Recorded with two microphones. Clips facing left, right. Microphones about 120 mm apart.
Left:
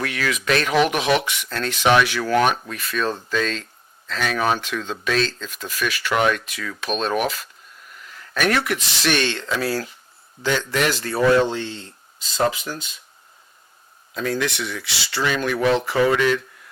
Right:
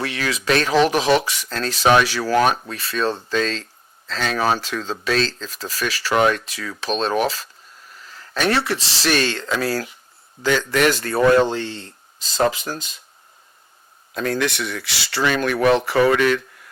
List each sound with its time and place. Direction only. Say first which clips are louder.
0.0 s speech: even; 30° right (ahead or behind)
14.1 s speech: right 2 dB; 55° right (ahead or behind)